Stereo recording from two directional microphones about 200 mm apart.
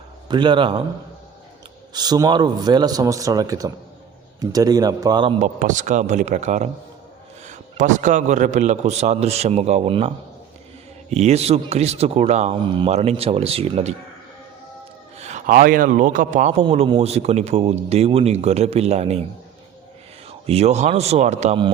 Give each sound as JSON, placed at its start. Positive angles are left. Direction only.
{"t": 0.3, "sound": "a man's voice", "side_deg": -25}
{"t": 1.9, "sound": "a man's voice", "side_deg": -20}
{"t": 5.4, "sound": "a man's voice", "side_deg": -40}
{"t": 11.1, "sound": "a man's voice", "side_deg": -35}
{"t": 15.2, "sound": "a man's voice", "side_deg": -35}
{"t": 20.5, "sound": "a man's voice", "side_deg": -30}